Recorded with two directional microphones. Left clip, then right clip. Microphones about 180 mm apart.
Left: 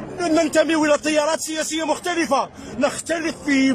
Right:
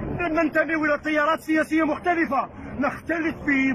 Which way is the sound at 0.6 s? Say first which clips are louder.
Left 5 dB; 40° left (ahead or behind).